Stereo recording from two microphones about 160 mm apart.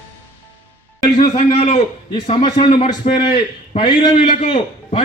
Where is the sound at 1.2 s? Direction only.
45° left (ahead or behind).